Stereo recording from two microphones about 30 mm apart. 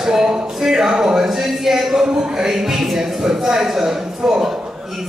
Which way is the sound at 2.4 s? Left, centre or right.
Centre.